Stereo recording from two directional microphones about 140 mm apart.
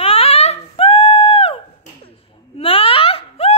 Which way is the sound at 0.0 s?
45° left (ahead or behind).